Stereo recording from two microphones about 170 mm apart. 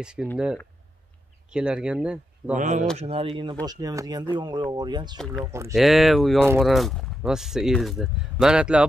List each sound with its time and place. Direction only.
0.0 s speech: 5° right (ahead or behind)
1.5 s speech: 5° right (ahead or behind)
2.5 s speech: 45° right (ahead or behind)
3.0 s speech: 35° right (ahead or behind)
3.6 s speech: 20° right (ahead or behind)
5.8 s speech: centre (ahead or behind)